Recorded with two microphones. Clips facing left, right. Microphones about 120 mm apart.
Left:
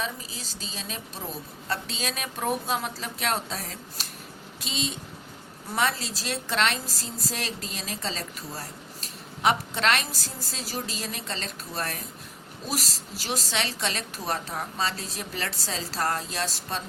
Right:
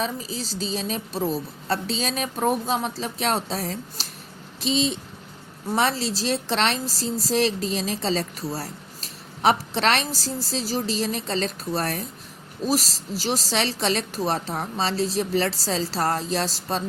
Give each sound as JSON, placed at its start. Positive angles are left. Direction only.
{"t": 0.0, "sound": "a woman's voice", "side_deg": -35}
{"t": 13.2, "sound": "a woman's voice", "side_deg": -35}